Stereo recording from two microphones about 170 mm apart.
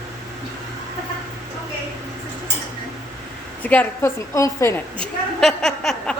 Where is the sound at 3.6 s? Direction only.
10° left (ahead or behind).